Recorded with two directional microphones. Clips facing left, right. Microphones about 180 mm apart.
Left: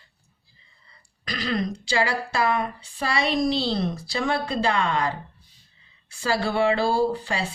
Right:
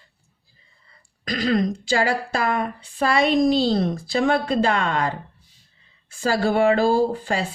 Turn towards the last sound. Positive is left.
turn(degrees=-45)  # may be behind; listen again after turning